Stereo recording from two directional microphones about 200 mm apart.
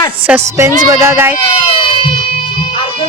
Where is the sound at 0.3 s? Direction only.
15° right (ahead or behind).